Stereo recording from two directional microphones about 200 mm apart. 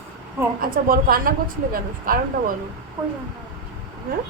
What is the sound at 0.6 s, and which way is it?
A woman's voice, 45° right (ahead or behind).